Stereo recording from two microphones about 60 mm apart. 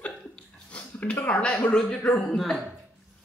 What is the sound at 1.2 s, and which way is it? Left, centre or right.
A woman's voice, left.